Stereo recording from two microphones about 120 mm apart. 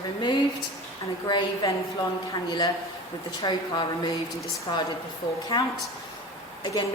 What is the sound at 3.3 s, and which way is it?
Speech, 35° left (ahead or behind).